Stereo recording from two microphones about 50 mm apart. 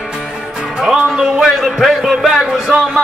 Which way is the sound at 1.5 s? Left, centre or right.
Centre.